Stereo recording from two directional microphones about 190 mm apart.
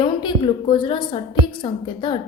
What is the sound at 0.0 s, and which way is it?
A woman's voice, 25° left (ahead or behind).